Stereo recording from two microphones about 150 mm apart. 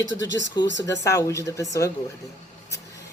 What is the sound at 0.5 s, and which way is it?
Speech, 25° left (ahead or behind).